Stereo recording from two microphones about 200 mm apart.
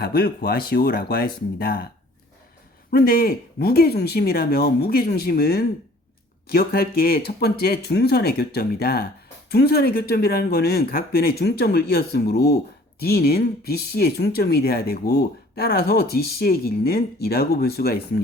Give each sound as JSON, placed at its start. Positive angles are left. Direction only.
{"t": 0.0, "sound": "speech", "side_deg": 50}
{"t": 2.9, "sound": "speech", "side_deg": 50}